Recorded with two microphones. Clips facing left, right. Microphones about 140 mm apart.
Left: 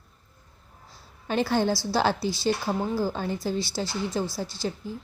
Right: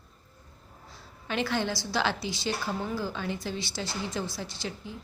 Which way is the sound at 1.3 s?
40° left (ahead or behind).